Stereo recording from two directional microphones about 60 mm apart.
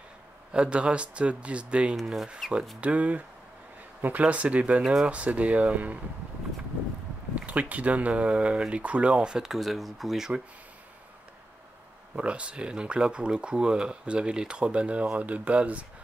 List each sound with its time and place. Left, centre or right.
0.5 s speech: centre
2.0 s speech: centre
2.8 s speech: right
7.3 s speech: right; by 10.4 s centre
12.2 s speech: centre